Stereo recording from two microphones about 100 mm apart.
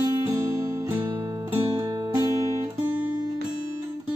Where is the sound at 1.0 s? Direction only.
35° right (ahead or behind).